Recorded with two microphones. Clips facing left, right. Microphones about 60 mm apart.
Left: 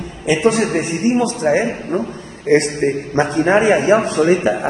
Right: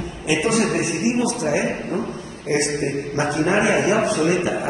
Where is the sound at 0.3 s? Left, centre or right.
Left.